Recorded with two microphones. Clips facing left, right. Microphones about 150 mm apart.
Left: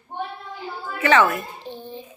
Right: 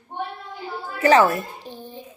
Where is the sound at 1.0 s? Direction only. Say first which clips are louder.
Right 2 dB; 35° right (ahead or behind).